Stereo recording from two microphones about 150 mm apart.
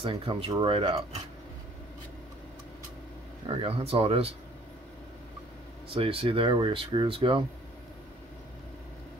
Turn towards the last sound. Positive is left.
turn(degrees=-35)  # may be behind; listen again after turning